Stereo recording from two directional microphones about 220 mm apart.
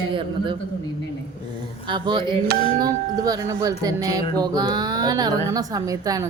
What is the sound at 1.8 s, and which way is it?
A woman's voice, 20° right (ahead or behind).